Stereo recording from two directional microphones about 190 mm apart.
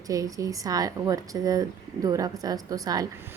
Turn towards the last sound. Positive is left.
turn(degrees=-20)  # may be behind; listen again after turning